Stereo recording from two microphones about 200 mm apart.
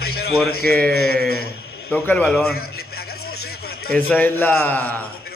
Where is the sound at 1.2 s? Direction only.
50° left (ahead or behind).